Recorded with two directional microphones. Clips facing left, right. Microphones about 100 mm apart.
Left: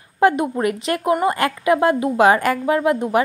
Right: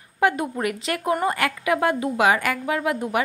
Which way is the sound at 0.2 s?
30° left (ahead or behind).